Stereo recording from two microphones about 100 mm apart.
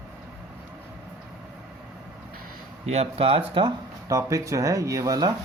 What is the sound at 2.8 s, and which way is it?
Speech, 90° right.